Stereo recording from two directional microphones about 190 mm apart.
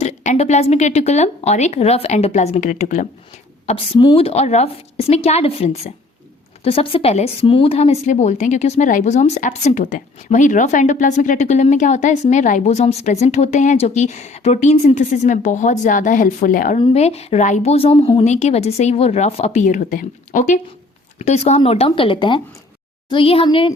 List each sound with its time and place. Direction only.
0.0 s speech: 35° left (ahead or behind)
3.7 s speech: 30° left (ahead or behind); by 16.8 s 45° left (ahead or behind)
16.8 s speech: 35° left (ahead or behind)